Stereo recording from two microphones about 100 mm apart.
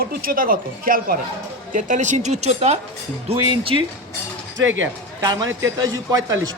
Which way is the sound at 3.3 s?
65° right (ahead or behind).